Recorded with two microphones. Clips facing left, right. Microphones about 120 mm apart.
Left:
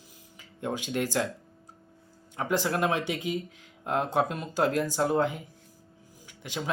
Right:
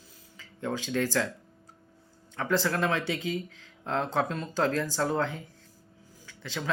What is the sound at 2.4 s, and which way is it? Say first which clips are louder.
Speech: even; 15° left (ahead or behind).